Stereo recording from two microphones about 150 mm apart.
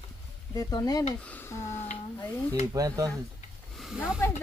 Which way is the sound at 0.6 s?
25° left (ahead or behind).